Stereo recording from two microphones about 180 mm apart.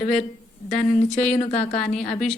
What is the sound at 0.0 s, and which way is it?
Speech, 40° left (ahead or behind).